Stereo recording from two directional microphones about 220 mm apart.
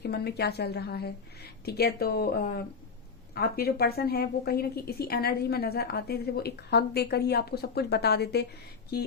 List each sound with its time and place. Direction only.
0.0 s a woman's voice: 45° left (ahead or behind)